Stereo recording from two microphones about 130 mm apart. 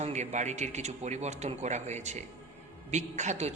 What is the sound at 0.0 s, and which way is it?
A woman's voice, 65° right (ahead or behind).